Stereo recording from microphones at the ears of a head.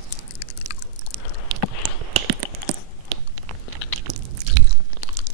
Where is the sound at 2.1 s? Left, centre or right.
Right.